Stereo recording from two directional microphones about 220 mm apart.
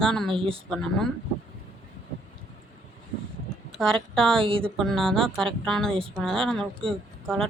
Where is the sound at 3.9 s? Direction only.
Centre (ahead or behind).